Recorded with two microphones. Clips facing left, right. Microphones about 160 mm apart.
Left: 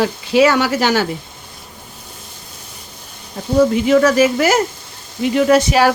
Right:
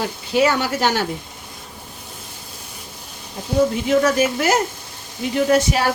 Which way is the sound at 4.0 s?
90° left.